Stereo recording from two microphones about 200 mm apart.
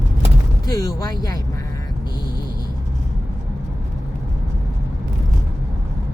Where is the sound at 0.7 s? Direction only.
15° left (ahead or behind).